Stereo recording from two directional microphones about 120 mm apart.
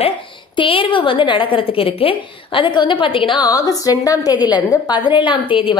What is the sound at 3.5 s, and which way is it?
A woman's voice, 30° left (ahead or behind).